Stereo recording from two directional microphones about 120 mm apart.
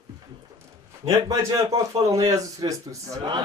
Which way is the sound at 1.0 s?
30° right (ahead or behind).